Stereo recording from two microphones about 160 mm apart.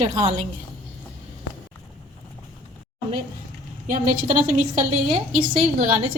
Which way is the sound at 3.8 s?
55° right (ahead or behind).